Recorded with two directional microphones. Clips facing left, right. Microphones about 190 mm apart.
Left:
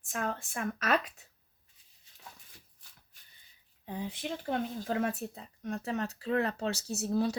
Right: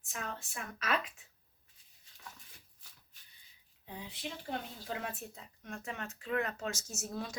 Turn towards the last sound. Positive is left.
turn(degrees=35)  # may be behind; listen again after turning